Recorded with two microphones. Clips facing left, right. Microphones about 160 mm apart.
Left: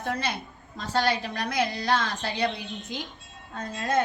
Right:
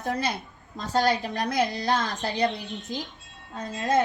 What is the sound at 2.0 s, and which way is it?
A child's voice, 40° right (ahead or behind).